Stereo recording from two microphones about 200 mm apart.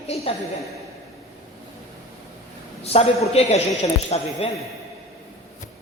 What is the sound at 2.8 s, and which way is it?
Speech, 30° left (ahead or behind).